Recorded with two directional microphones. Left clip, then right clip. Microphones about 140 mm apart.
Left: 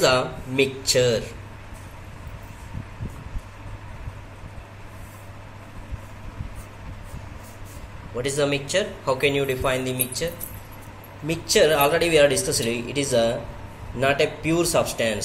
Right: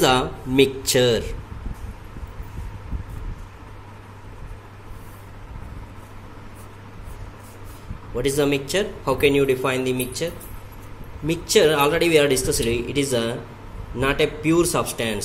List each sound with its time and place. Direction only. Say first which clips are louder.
0.0 s speech: right 1 dB; 90° right
8.2 s speech: right 2 dB; 60° right (ahead or behind)